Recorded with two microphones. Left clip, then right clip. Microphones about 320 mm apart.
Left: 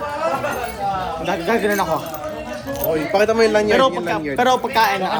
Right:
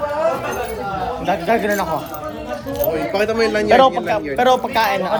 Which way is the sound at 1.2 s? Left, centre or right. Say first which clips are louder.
Right 2 dB; centre.